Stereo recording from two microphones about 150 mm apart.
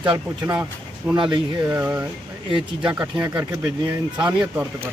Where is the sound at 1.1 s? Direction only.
30° right (ahead or behind).